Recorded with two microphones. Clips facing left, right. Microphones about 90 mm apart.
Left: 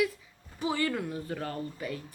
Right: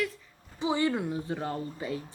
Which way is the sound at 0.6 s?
20° right (ahead or behind).